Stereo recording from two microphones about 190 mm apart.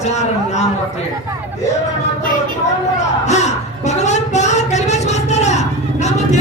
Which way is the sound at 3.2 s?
35° left (ahead or behind).